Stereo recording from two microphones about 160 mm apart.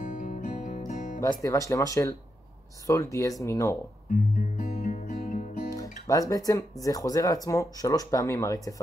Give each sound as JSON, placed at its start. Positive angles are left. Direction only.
{"t": 0.0, "sound": "music", "side_deg": 55}
{"t": 1.4, "sound": "speech", "side_deg": 20}
{"t": 4.1, "sound": "music", "side_deg": 55}
{"t": 5.8, "sound": "speech", "side_deg": 20}